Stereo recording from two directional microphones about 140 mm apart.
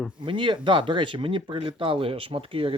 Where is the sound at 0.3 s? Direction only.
35° right (ahead or behind).